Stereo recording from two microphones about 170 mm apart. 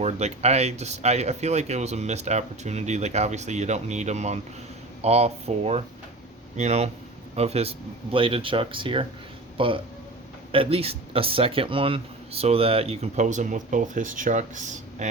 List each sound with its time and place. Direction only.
0.0 s speech: 40° right (ahead or behind)